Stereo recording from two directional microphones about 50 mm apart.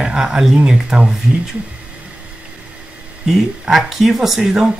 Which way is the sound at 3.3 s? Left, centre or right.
Centre.